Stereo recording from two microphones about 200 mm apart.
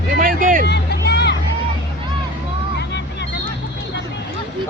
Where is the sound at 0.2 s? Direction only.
45° right (ahead or behind).